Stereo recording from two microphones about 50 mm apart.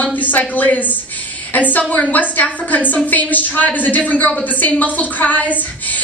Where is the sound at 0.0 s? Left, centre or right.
Left.